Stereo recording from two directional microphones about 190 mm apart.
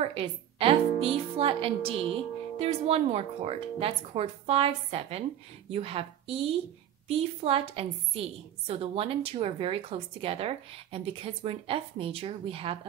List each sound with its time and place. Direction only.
0.0 s a woman's voice: 30° right (ahead or behind)